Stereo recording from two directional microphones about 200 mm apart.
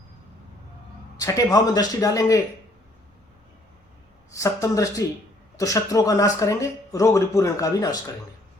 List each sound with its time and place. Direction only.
1.1 s speech: 20° left (ahead or behind)
4.3 s speech: 15° left (ahead or behind)